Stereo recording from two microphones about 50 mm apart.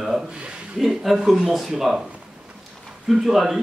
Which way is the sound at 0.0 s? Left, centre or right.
Centre.